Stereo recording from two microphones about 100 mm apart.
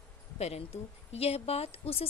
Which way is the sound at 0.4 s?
90° left.